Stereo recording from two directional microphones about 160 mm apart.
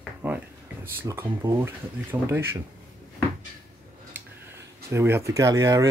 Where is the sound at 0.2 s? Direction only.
10° right (ahead or behind).